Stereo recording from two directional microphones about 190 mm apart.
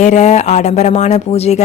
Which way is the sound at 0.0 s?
35° left (ahead or behind).